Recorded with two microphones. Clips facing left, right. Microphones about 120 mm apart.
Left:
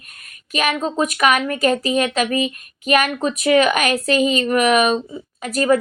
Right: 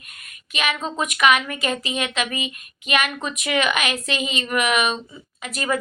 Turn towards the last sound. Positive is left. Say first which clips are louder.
# left 8 dB
turn(degrees=40)  # may be behind; listen again after turning